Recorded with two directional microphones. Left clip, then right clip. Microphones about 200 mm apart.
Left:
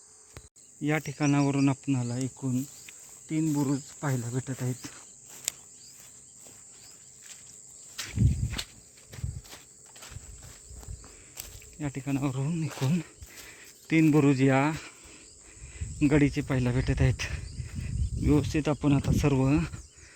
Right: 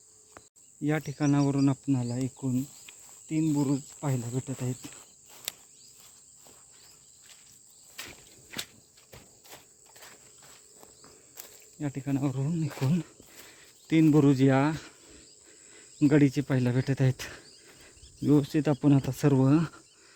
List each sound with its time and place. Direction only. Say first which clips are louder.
0.8 s speech: left 1 dB; 5° right (ahead or behind)
5.3 s cricket: left 3 dB; centre (ahead or behind)
9.5 s walk: right 1 dB; 15° right (ahead or behind)
10.4 s walk: left 2 dB; centre (ahead or behind)
11.4 s cricket: left 4 dB; 15° right (ahead or behind)
11.8 s speech: even; 5° right (ahead or behind)